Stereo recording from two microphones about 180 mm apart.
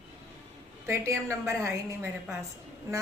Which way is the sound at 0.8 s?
15° right (ahead or behind).